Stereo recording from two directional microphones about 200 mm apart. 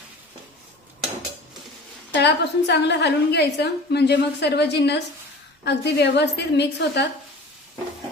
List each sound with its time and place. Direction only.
2.1 s a woman's voice: 60° left (ahead or behind)